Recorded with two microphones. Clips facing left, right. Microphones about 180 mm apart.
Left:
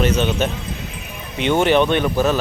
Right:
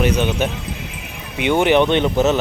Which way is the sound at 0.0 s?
15° right (ahead or behind).